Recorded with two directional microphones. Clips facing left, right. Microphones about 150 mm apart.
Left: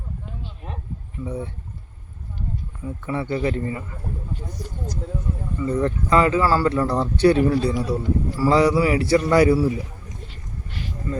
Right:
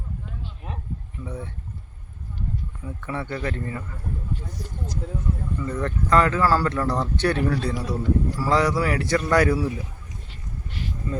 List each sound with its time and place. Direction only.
1.2 s speech: 10° left (ahead or behind)
2.8 s speech: 5° left (ahead or behind)
5.5 s speech: 10° left (ahead or behind)